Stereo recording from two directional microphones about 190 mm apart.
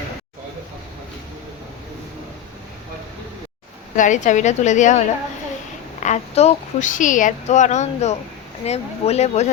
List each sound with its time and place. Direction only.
3.9 s a woman's voice: 40° left (ahead or behind)